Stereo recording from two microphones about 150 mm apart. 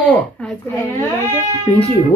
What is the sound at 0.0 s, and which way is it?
Speech, 10° left (ahead or behind).